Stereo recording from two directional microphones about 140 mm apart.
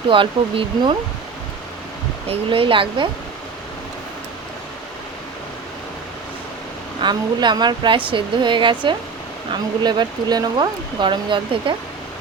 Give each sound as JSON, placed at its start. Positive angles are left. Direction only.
{"t": 0.1, "sound": "speech", "side_deg": -35}
{"t": 2.2, "sound": "speech", "side_deg": -40}
{"t": 7.0, "sound": "speech", "side_deg": -30}